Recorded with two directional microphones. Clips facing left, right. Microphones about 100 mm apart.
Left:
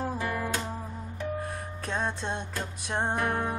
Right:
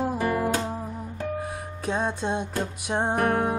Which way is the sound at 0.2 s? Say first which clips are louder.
Right 7 dB; 30° right (ahead or behind).